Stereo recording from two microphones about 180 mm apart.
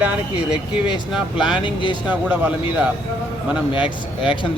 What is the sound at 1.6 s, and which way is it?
Speech, 25° left (ahead or behind).